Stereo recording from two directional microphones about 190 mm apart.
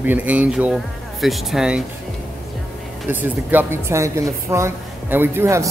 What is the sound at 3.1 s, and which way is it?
Speech, 10° right (ahead or behind).